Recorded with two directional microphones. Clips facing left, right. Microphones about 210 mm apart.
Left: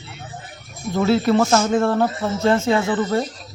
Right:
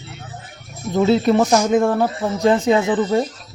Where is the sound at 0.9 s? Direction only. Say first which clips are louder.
Right 2 dB; 20° right (ahead or behind).